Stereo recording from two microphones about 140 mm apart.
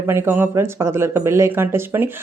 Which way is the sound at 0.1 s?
15° right (ahead or behind).